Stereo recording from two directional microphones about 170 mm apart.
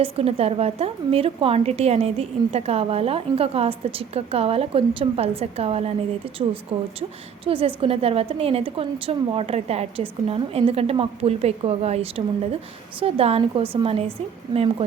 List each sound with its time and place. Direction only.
0.0 s a woman's voice: 35° right (ahead or behind)
7.4 s a woman's voice: 35° right (ahead or behind)